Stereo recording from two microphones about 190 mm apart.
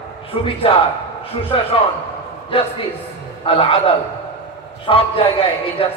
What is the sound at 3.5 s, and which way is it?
A man's voice, 30° left (ahead or behind).